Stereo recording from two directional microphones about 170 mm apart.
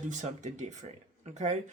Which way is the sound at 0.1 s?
45° right (ahead or behind).